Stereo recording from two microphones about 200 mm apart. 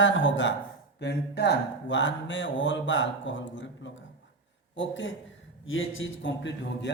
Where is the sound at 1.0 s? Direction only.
55° left (ahead or behind).